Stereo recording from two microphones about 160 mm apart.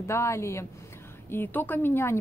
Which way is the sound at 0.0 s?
15° left (ahead or behind).